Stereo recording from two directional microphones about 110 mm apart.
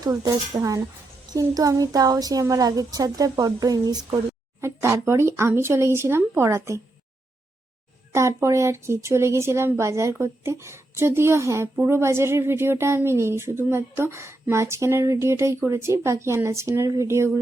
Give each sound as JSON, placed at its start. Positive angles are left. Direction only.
{"t": 0.0, "sound": "a woman's voice", "side_deg": -35}
{"t": 4.6, "sound": "a woman's voice", "side_deg": -25}
{"t": 8.1, "sound": "a woman's voice", "side_deg": -25}